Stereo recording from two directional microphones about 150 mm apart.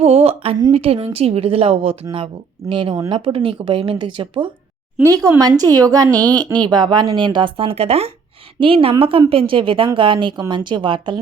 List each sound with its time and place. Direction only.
0.0 s a woman's voice: 40° right (ahead or behind)